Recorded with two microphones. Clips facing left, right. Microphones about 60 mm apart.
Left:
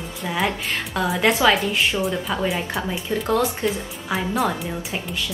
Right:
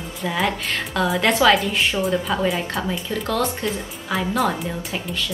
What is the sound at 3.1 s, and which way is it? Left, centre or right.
Speech, left.